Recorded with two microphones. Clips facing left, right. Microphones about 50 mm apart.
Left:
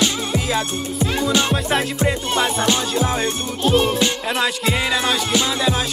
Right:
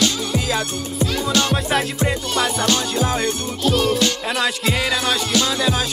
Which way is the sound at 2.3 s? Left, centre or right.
Centre.